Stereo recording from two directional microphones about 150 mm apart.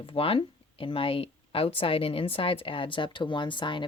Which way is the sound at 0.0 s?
35° left (ahead or behind).